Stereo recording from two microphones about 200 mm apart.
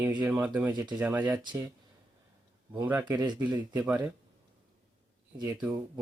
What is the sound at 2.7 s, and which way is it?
Speech, 15° right (ahead or behind).